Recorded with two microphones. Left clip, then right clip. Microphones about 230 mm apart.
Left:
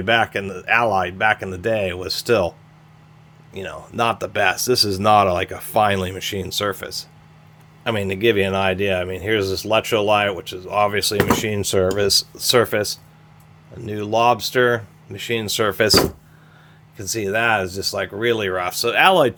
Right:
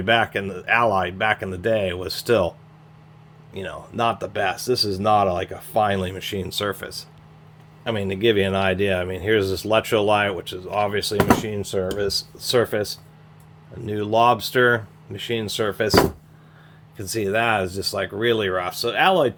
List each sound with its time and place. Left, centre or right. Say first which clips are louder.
0.0 s speech: left 1 dB; centre
11.3 s speech: left 1 dB; left
13.7 s speech: even; centre; by 16.0 s left
17.0 s speech: left 1 dB; centre; by 19.4 s left